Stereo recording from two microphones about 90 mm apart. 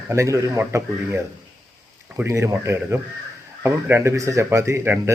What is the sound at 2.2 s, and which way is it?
A man's voice, 30° right (ahead or behind).